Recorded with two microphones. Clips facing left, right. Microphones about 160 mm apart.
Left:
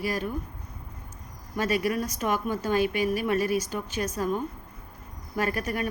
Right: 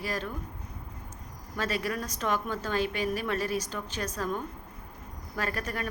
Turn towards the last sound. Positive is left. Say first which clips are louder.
# left 5 dB
turn(degrees=10)  # may be behind; listen again after turning